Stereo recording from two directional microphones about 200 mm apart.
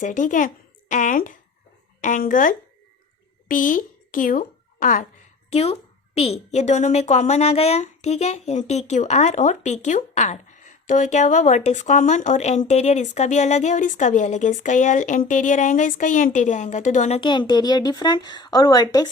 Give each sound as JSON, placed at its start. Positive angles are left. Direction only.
{"t": 0.0, "sound": "a woman's voice", "side_deg": 40}
{"t": 5.5, "sound": "a woman's voice", "side_deg": 30}
{"t": 17.2, "sound": "a woman's voice", "side_deg": 20}